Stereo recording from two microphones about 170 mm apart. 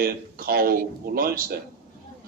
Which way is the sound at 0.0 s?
60° right (ahead or behind).